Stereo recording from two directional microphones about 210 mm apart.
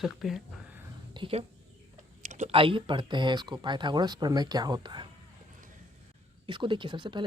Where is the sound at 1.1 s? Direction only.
25° right (ahead or behind).